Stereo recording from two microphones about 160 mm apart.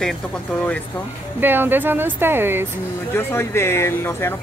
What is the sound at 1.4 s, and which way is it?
Speech, 10° right (ahead or behind).